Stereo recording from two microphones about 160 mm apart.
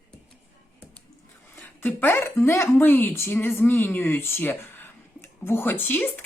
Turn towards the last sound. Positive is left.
turn(degrees=10)  # may be behind; listen again after turning